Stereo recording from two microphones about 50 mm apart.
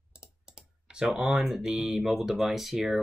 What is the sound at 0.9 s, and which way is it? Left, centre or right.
Speech, centre.